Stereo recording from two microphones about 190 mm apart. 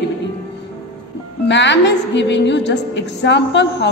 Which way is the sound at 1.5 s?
70° left (ahead or behind).